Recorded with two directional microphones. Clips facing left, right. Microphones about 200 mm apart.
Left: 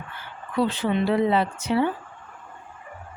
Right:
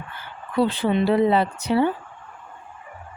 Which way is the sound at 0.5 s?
35° right (ahead or behind).